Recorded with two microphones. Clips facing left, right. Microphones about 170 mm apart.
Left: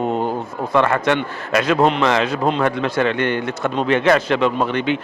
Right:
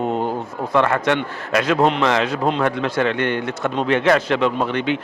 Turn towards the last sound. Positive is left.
turn(degrees=10)  # may be behind; listen again after turning